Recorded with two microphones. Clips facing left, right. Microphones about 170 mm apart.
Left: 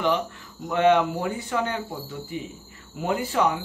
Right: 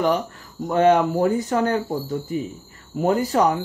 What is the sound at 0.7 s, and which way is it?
Speech, 40° right (ahead or behind).